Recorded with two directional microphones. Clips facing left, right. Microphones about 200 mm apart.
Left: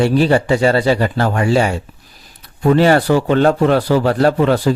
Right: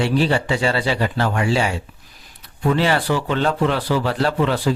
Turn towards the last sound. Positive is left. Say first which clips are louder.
# left 6 dB
turn(degrees=45)  # may be behind; listen again after turning